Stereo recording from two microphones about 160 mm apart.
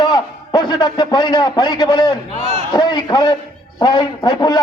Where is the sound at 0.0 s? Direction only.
25° left (ahead or behind).